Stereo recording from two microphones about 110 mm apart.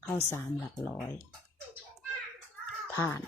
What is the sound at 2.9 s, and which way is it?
Speech, 20° left (ahead or behind).